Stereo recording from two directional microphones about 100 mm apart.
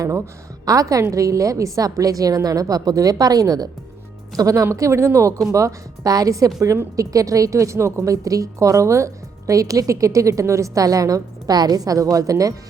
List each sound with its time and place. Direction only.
0.6 s a woman's voice: 35° right (ahead or behind)